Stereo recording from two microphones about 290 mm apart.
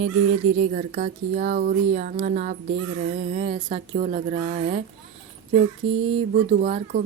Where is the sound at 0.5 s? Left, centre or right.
Right.